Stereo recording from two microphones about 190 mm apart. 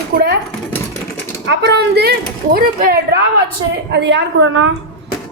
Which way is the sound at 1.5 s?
60° right (ahead or behind).